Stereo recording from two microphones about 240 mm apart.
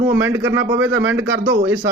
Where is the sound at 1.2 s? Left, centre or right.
Right.